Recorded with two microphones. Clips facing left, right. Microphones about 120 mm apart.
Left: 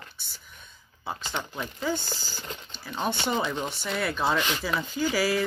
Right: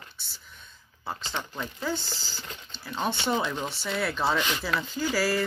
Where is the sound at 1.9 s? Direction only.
50° left (ahead or behind).